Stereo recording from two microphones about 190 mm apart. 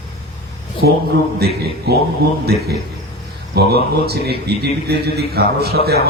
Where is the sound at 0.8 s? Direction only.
55° right (ahead or behind).